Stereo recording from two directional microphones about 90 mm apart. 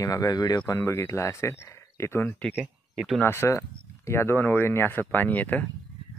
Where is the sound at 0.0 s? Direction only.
40° left (ahead or behind).